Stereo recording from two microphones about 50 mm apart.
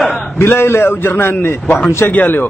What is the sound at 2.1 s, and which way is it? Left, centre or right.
Speech, left.